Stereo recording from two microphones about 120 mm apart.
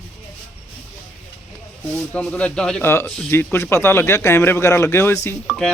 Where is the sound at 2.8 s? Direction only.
20° left (ahead or behind).